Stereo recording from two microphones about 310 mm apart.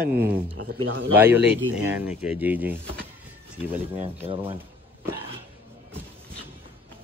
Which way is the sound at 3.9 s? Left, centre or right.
Centre.